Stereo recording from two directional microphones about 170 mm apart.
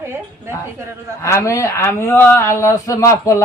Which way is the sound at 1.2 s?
15° left (ahead or behind).